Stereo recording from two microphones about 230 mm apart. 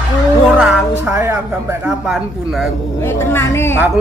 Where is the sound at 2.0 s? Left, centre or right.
Centre.